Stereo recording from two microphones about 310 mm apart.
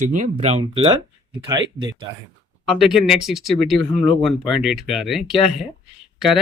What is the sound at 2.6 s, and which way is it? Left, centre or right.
Speech, centre.